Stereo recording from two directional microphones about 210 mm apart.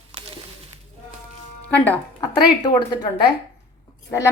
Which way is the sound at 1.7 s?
5° left (ahead or behind).